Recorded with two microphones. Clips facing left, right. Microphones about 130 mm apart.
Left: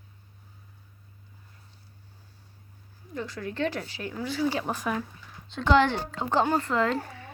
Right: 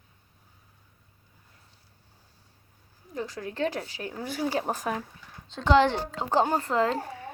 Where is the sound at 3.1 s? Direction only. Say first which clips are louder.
Even; 40° right (ahead or behind).